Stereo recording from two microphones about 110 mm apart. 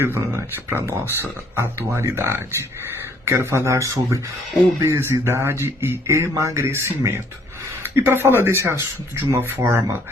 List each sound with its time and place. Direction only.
0.0 s speech: 20° right (ahead or behind)